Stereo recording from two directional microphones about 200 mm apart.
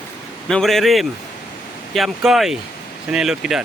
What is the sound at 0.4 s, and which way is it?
Speech, centre (ahead or behind).